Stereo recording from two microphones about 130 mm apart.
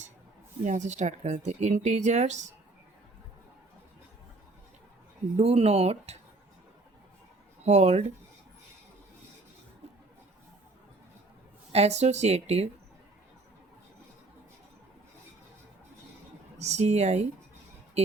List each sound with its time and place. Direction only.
0.6 s speech: 70° right (ahead or behind)
5.4 s speech: 50° right (ahead or behind)
7.6 s speech: 60° right (ahead or behind)
11.7 s speech: 55° right (ahead or behind)
16.6 s speech: 60° right (ahead or behind)